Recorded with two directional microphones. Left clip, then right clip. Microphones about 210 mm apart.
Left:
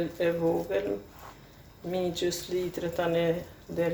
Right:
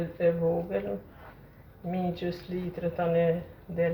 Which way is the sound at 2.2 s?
40° left (ahead or behind).